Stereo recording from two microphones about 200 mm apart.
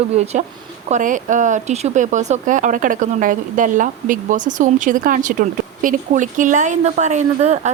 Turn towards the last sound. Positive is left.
turn(degrees=-35)  # may be behind; listen again after turning